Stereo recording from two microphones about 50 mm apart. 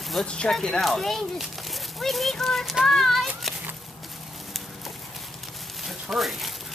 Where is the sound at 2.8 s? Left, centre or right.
Centre.